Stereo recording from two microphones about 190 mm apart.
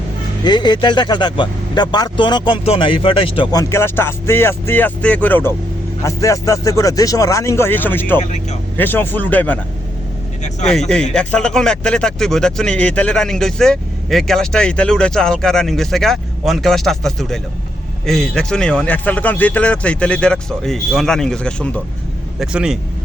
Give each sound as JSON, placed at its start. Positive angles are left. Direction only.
{"t": 0.4, "sound": "speech", "side_deg": 20}
{"t": 8.2, "sound": "speech", "side_deg": 35}
{"t": 8.8, "sound": "speech", "side_deg": 10}
{"t": 10.6, "sound": "speech", "side_deg": 5}